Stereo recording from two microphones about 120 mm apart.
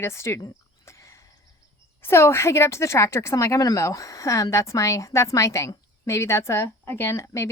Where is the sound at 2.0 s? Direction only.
20° left (ahead or behind).